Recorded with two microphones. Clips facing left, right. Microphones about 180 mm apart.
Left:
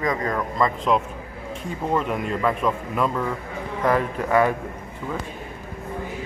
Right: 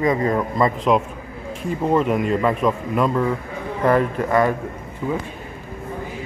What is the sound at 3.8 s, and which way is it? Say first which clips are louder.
Speech: right 4 dB; 5° left (ahead or behind).